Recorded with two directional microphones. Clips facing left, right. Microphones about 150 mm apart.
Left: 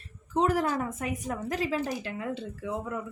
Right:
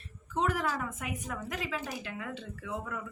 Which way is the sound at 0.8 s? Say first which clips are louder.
Left 5 dB; 35° left (ahead or behind).